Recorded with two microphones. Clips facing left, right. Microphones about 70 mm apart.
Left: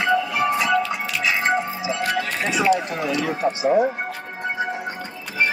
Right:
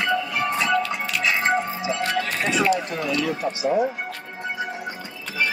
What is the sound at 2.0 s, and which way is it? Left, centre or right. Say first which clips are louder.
Music: left 2 dB; centre.